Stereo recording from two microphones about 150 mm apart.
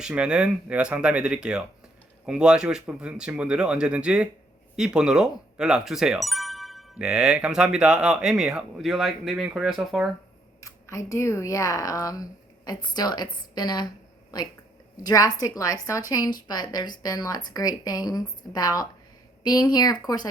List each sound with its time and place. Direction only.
0.0 s speech: 5° right (ahead or behind)
10.6 s speech: 20° left (ahead or behind)
15.0 s a woman's voice: 25° left (ahead or behind)